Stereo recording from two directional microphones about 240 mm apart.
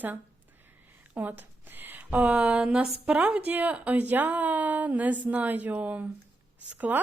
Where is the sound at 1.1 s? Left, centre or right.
Centre.